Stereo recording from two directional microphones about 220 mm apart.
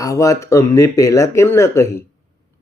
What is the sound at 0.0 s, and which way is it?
Speech, 15° left (ahead or behind).